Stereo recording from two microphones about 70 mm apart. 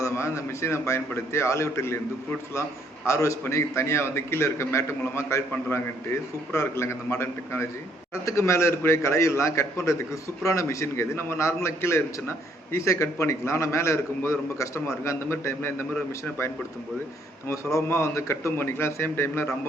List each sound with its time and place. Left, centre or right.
0.0 s a man's voice: left
3.1 s a man's voice: left
17.5 s a man's voice: left